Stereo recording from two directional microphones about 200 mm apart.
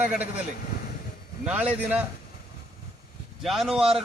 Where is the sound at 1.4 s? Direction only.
5° right (ahead or behind).